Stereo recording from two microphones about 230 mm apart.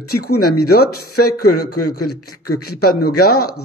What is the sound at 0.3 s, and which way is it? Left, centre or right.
A man's voice, left.